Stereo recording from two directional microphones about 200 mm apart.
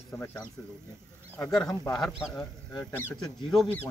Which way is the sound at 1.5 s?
Centre (ahead or behind).